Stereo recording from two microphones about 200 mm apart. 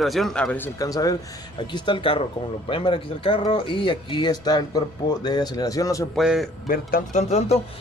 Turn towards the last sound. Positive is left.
turn(degrees=30)  # may be behind; listen again after turning